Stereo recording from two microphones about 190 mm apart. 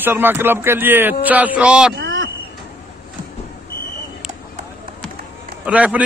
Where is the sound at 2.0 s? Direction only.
90° right.